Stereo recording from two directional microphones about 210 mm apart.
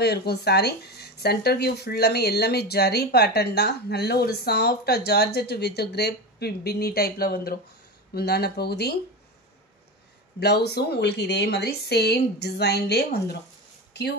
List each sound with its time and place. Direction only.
0.0 s speech: 50° left (ahead or behind)
10.4 s speech: 50° left (ahead or behind)